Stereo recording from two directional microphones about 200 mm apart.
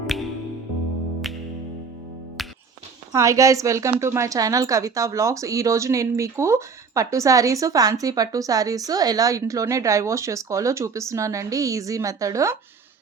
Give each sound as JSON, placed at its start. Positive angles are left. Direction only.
{"t": 1.2, "sound": "music", "side_deg": 0}
{"t": 3.1, "sound": "a woman's voice", "side_deg": -15}